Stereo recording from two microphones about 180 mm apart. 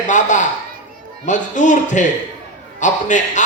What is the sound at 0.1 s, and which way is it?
A man's voice, 45° left (ahead or behind).